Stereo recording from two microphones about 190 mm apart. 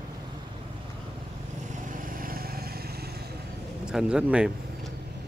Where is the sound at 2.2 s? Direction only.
50° right (ahead or behind).